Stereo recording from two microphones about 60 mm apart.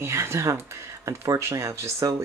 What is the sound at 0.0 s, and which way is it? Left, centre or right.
Speech, right.